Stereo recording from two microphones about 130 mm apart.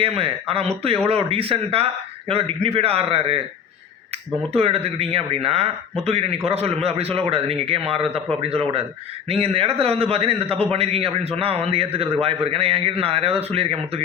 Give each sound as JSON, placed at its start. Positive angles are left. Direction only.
{"t": 0.0, "sound": "a man's voice", "side_deg": -45}
{"t": 4.5, "sound": "a man's voice", "side_deg": -50}